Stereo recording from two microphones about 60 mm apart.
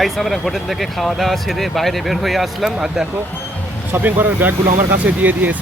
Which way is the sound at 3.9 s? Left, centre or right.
Right.